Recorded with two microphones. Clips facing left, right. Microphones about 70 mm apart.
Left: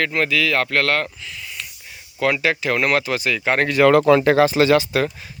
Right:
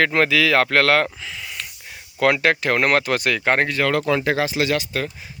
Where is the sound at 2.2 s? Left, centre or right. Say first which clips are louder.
Right 2 dB; right.